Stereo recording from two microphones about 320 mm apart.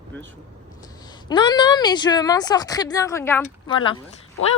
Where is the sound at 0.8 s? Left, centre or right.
Centre.